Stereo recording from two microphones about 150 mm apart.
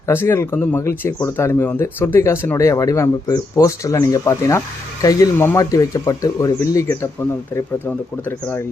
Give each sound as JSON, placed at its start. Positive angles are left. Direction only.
{"t": 0.1, "sound": "speech", "side_deg": 15}